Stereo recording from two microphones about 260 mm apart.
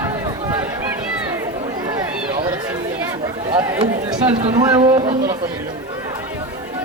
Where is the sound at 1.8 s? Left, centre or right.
Centre.